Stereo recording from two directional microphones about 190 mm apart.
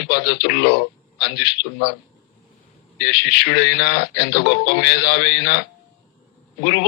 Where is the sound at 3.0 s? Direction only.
65° left (ahead or behind).